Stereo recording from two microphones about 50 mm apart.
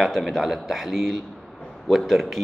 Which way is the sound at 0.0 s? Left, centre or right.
Centre.